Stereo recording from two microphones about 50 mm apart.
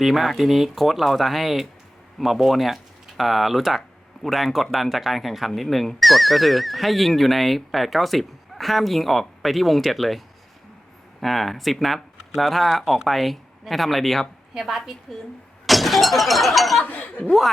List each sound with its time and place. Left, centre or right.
0.0 s speech: centre
15.6 s breaking: centre
16.8 s speech: left